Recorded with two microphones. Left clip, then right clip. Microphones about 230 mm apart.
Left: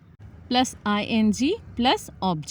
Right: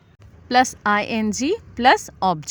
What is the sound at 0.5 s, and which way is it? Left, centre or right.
A woman's voice, right.